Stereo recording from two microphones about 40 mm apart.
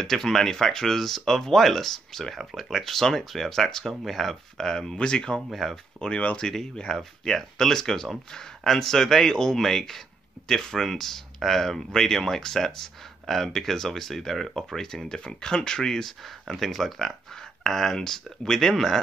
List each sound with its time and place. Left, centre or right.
0.0 s speech: centre
5.5 s speech: centre
5.9 s speech: left
16.1 s speech: centre